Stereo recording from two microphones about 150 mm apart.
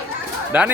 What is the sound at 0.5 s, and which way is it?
Speech, 10° right (ahead or behind).